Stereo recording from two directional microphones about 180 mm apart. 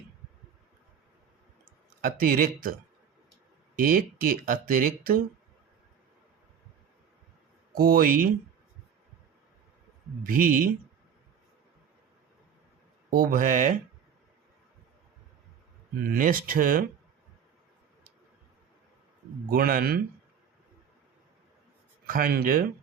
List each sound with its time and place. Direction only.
2.0 s speech: 50° right (ahead or behind)
3.8 s speech: 50° right (ahead or behind)
7.7 s speech: 55° right (ahead or behind)
10.2 s speech: 50° right (ahead or behind)
13.1 s speech: 50° right (ahead or behind)
16.0 s speech: 50° right (ahead or behind)
19.5 s a man's voice: 55° right (ahead or behind)
22.0 s speech: 50° right (ahead or behind)